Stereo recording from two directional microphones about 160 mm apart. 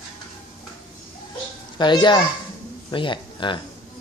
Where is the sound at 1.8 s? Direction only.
30° left (ahead or behind).